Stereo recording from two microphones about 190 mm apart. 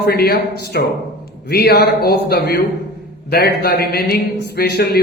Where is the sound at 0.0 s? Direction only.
60° left (ahead or behind).